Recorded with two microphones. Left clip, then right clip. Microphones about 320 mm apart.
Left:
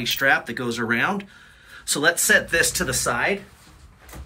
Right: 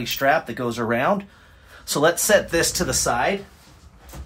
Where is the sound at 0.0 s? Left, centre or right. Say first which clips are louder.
Even; right.